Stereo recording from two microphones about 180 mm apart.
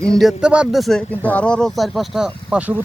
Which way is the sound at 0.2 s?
5° right (ahead or behind).